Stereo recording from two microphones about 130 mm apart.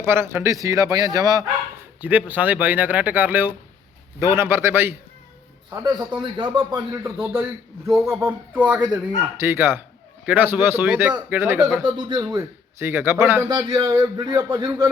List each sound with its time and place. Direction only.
0.0 s a man's voice: 20° right (ahead or behind)
2.0 s a man's voice: 10° right (ahead or behind); by 6.7 s 35° right (ahead or behind)
7.0 s a man's voice: 20° right (ahead or behind)
11.9 s a man's voice: 35° right (ahead or behind); by 13.4 s 15° right (ahead or behind)
13.5 s a man's voice: 35° right (ahead or behind)